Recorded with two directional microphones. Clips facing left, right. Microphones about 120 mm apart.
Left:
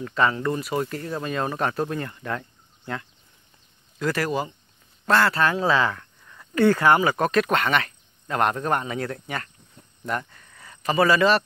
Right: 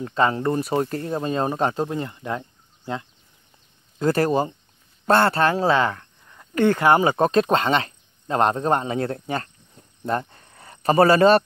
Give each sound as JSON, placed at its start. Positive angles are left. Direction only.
{"t": 0.0, "sound": "speech", "side_deg": -30}
{"t": 4.0, "sound": "speech", "side_deg": -30}